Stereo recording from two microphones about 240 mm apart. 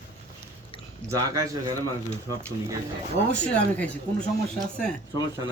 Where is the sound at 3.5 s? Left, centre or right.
Centre.